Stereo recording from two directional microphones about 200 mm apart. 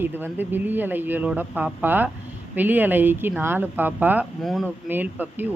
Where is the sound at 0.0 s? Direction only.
10° right (ahead or behind).